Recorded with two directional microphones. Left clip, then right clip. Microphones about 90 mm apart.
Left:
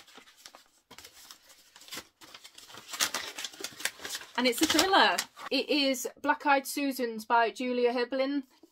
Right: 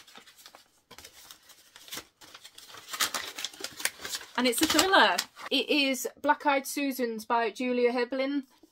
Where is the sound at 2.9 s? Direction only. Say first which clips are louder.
Right 1 dB; 20° right (ahead or behind).